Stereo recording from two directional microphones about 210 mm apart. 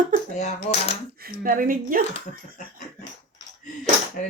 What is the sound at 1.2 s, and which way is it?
Speech, 45° right (ahead or behind).